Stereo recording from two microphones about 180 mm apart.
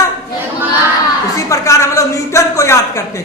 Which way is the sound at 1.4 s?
15° left (ahead or behind).